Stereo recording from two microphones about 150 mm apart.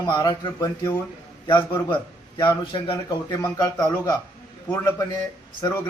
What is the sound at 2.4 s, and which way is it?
A man's voice, 30° left (ahead or behind).